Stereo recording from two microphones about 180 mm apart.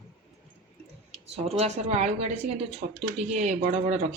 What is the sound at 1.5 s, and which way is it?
A woman's voice, 35° right (ahead or behind).